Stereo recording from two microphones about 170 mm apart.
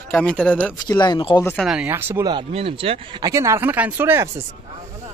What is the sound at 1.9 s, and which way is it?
Speech, 10° right (ahead or behind).